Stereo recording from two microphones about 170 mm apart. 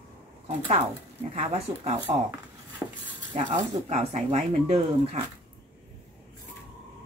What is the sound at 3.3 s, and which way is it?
Speech, 40° right (ahead or behind).